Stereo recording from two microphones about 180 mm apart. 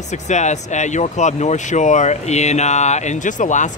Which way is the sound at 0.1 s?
40° left (ahead or behind).